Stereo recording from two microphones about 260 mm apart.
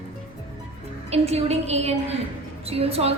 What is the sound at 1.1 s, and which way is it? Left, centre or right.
A woman's voice, right.